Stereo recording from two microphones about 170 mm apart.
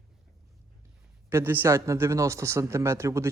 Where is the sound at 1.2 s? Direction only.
15° right (ahead or behind).